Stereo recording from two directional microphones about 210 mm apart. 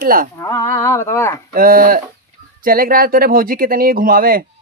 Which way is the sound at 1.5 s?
45° right (ahead or behind).